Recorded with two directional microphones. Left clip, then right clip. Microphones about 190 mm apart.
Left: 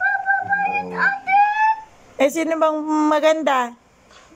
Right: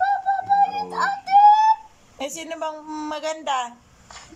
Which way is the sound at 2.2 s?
25° left (ahead or behind).